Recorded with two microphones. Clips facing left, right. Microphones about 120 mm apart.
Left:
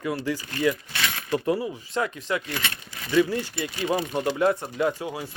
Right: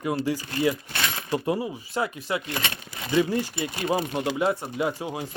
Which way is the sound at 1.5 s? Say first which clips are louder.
Left 1 dB; 15° right (ahead or behind).